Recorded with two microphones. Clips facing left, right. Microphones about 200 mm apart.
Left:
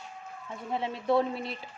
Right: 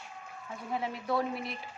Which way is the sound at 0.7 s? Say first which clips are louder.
Left 5 dB; 25° left (ahead or behind).